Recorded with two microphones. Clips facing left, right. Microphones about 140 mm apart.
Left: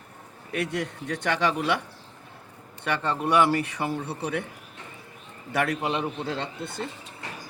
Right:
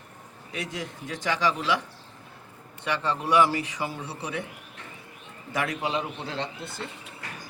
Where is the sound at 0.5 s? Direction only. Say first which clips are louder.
Left 6 dB; 60° left (ahead or behind).